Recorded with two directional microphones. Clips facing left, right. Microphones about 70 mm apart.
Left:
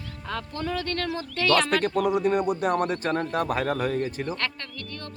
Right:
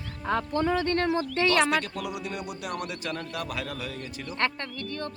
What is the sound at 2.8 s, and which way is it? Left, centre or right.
Speech, left.